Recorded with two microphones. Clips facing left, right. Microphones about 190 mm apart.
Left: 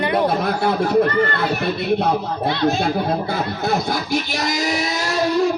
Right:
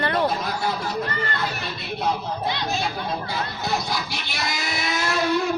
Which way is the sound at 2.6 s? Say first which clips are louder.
Left 8 dB; 55° left (ahead or behind).